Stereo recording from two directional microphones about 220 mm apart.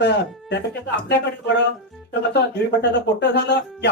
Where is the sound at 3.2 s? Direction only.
50° left (ahead or behind).